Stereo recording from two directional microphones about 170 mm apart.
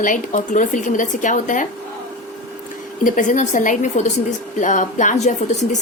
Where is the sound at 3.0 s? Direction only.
50° left (ahead or behind).